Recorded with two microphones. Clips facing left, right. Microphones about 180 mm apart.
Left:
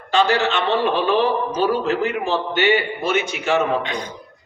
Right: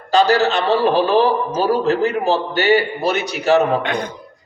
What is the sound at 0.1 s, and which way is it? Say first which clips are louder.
A man's voice: right 4 dB; 40° right (ahead or behind).